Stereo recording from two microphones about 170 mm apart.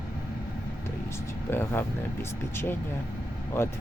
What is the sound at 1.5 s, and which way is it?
Speech, 15° left (ahead or behind).